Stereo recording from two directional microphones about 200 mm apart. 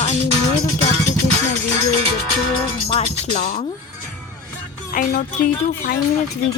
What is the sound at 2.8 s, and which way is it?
Speech, 30° left (ahead or behind).